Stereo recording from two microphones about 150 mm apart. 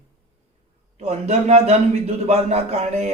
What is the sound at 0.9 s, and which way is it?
A man's voice, 45° right (ahead or behind).